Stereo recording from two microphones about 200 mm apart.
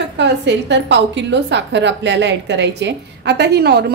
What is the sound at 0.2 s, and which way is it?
A woman's voice, 60° right (ahead or behind).